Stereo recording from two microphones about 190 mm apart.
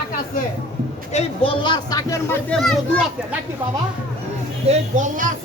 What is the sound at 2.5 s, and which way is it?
Speech, 5° left (ahead or behind).